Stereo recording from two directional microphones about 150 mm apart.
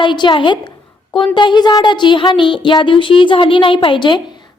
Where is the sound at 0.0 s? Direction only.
30° left (ahead or behind).